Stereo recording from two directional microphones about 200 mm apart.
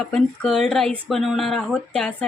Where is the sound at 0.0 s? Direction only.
Centre (ahead or behind).